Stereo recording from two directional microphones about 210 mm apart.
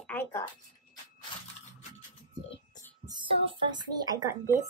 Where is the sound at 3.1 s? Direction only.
20° right (ahead or behind).